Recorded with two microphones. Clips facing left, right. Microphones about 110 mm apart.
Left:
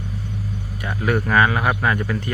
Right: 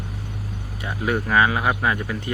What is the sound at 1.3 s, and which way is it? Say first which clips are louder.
Speech: even; 15° right (ahead or behind).